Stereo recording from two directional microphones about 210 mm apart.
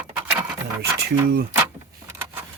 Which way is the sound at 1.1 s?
45° right (ahead or behind).